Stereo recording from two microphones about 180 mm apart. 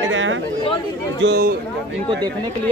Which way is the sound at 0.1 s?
90° right.